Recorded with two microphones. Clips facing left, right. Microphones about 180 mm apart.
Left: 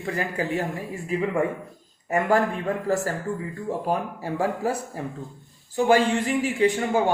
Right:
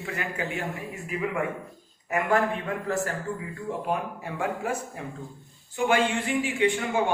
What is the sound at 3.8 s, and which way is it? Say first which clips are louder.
Speech: left 2 dB; 35° left (ahead or behind).